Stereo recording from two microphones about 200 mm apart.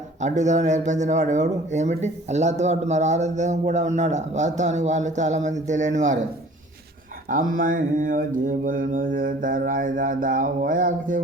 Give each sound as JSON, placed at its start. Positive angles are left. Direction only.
{"t": 0.2, "sound": "speech", "side_deg": -35}
{"t": 7.3, "sound": "mantra", "side_deg": -45}